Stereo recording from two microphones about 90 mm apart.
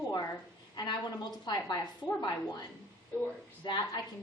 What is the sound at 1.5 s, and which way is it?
A woman's voice, 55° left (ahead or behind).